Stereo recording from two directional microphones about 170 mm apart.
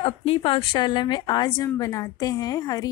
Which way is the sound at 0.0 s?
35° left (ahead or behind).